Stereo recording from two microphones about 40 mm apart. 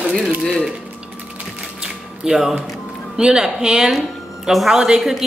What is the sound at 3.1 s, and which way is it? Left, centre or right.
Speech, centre.